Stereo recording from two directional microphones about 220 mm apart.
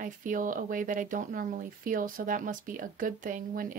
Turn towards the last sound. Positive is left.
turn(degrees=-40)  # may be behind; listen again after turning